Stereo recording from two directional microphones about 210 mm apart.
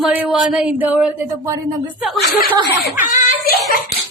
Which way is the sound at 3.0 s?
45° left (ahead or behind).